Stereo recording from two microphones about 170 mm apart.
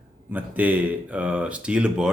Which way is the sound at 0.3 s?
10° right (ahead or behind).